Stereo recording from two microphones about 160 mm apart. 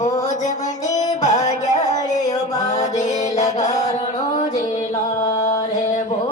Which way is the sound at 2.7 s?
45° left (ahead or behind).